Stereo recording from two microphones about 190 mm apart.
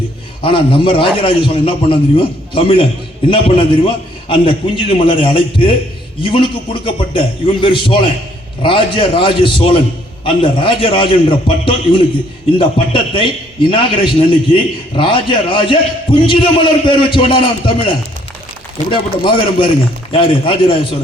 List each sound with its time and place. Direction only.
0.4 s a man's voice: 25° left (ahead or behind)
18.9 s a man's voice: 25° left (ahead or behind)